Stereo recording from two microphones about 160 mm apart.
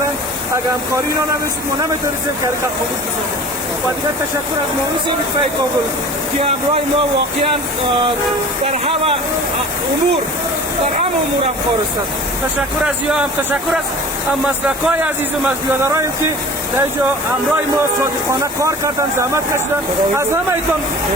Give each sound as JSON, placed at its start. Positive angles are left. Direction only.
{"t": 14.4, "sound": "speech", "side_deg": -10}
{"t": 18.6, "sound": "speech", "side_deg": -15}